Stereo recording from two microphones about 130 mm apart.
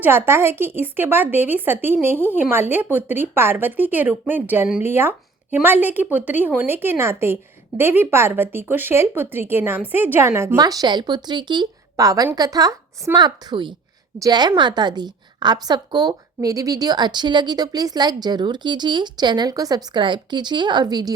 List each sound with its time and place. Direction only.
0.0 s a woman's voice: 15° right (ahead or behind); by 21.1 s 30° right (ahead or behind)